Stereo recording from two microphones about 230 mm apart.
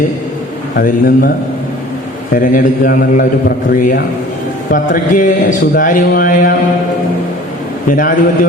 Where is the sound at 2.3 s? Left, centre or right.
Left.